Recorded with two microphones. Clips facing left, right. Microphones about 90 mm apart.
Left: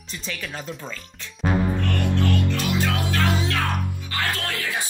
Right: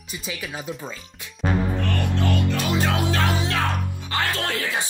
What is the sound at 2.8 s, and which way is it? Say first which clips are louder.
Music: right 1 dB; 25° right (ahead or behind).